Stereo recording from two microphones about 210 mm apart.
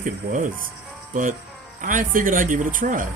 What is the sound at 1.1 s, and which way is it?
Speech, 40° right (ahead or behind).